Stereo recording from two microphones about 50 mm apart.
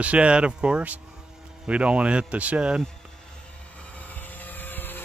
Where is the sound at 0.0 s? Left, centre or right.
Right.